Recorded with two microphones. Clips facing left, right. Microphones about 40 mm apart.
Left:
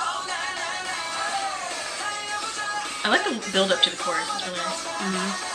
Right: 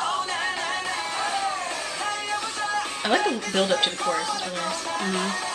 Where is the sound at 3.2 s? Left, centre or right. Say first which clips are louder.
Even; centre.